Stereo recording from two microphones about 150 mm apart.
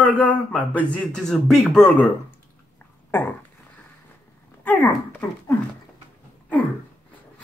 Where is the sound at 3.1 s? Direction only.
10° left (ahead or behind).